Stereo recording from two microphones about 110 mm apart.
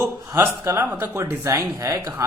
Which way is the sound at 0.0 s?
20° right (ahead or behind).